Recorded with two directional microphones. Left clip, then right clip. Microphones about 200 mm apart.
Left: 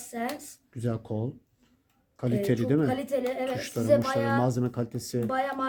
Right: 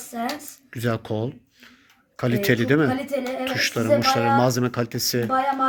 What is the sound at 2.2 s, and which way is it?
Speech, 5° left (ahead or behind).